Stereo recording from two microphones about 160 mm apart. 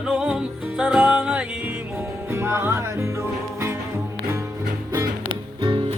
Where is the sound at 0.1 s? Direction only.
5° right (ahead or behind).